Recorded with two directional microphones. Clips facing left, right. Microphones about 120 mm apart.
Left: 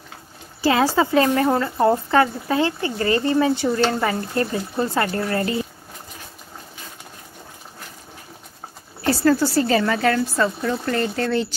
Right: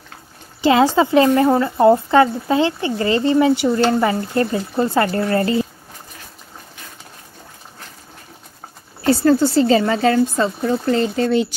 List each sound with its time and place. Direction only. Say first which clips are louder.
0.6 s speech: right 4 dB; 20° right (ahead or behind)
9.0 s speech: right 4 dB; 25° right (ahead or behind)